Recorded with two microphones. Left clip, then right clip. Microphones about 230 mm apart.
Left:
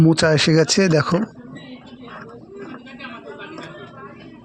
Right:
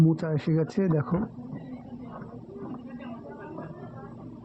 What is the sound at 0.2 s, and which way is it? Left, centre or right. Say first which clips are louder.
Speech: left 14 dB; left.